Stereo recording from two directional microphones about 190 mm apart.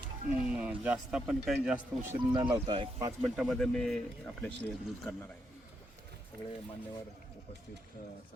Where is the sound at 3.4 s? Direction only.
Centre (ahead or behind).